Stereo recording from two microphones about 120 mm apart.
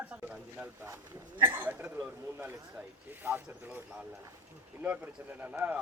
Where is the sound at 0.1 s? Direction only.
10° right (ahead or behind).